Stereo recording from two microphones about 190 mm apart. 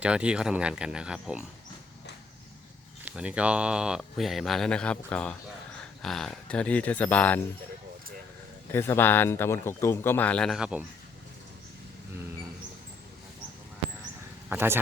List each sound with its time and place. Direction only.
0.0 s speech: 5° right (ahead or behind)
3.0 s speech: 5° right (ahead or behind)
8.7 s speech: 10° left (ahead or behind); by 10.8 s 5° right (ahead or behind)
14.5 s a man's voice: 10° right (ahead or behind)